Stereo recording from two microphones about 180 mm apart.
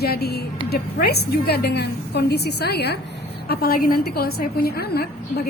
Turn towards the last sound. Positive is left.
turn(degrees=60)  # may be behind; listen again after turning